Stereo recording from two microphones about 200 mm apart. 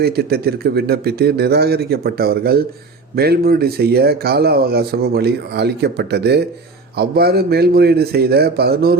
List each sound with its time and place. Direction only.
0.0 s speech: 50° right (ahead or behind)